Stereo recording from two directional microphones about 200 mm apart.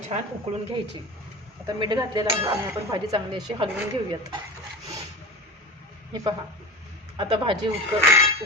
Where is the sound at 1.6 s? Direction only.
20° right (ahead or behind).